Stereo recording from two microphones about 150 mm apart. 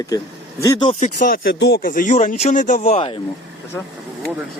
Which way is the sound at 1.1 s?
75° left (ahead or behind).